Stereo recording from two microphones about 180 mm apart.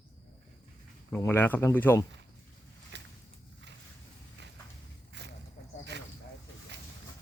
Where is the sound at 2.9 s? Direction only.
75° right (ahead or behind).